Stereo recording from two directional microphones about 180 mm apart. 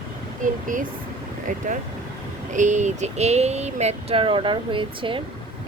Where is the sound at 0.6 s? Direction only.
45° right (ahead or behind).